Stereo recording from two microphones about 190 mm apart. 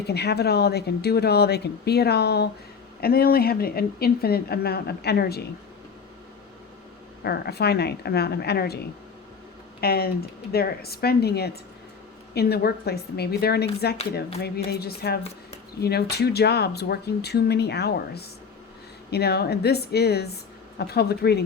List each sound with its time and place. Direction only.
0.1 s speech: 60° left (ahead or behind)
7.3 s speech: 55° left (ahead or behind)
9.8 s speech: 55° left (ahead or behind)